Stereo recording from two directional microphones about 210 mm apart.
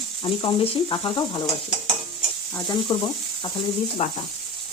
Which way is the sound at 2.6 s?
20° left (ahead or behind).